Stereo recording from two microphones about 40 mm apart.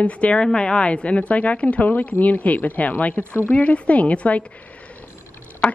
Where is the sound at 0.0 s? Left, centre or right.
Left.